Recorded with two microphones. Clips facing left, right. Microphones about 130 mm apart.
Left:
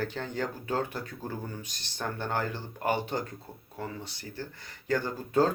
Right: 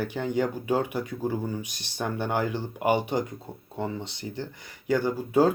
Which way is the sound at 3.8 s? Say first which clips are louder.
Right 7 dB; 25° right (ahead or behind).